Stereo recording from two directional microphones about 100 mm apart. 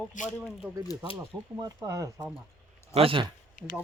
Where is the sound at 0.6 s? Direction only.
15° right (ahead or behind).